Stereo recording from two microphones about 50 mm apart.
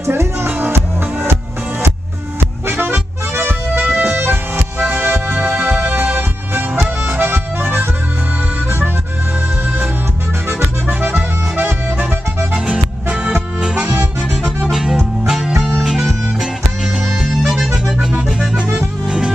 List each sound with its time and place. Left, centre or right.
0.7 s music: right
2.7 s music: right
3.9 s music: right
4.2 s music: right
4.7 s music: right
7.1 s accordion: right
10.9 s accordion: right
11.1 s accordion: right
12.5 s music: centre
13.7 s accordion: right
14.7 s music: centre
17.2 s accordion: centre
18.8 s music: centre